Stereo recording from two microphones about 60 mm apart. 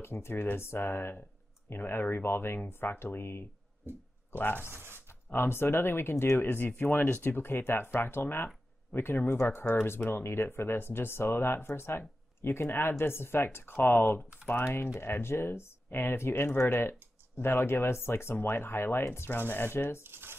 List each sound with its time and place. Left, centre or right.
0.0 s speech: left
3.9 s speech: right
4.3 s speech: left
4.6 s speech: right
5.0 s speech: left
20.0 s speech: right